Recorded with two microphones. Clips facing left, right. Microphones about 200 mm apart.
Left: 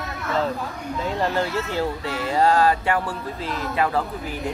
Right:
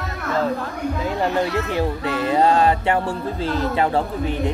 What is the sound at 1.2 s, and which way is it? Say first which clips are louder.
Speech: right 3 dB; 15° right (ahead or behind).